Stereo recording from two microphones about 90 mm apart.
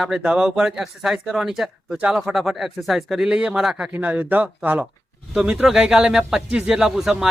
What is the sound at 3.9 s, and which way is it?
Speech, 20° right (ahead or behind).